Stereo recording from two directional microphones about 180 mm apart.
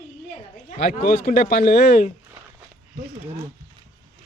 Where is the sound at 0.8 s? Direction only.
55° left (ahead or behind).